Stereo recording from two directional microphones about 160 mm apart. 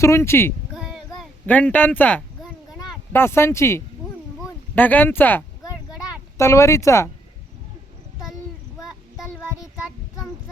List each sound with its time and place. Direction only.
0.0 s speech: 15° left (ahead or behind)
0.7 s child singing: centre (ahead or behind)
1.5 s speech: 10° left (ahead or behind)
8.8 s child singing: centre (ahead or behind)